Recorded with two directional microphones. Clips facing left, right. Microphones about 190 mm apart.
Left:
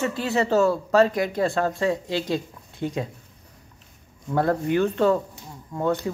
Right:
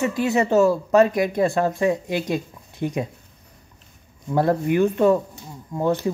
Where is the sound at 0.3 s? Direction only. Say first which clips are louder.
Right 2 dB; 20° right (ahead or behind).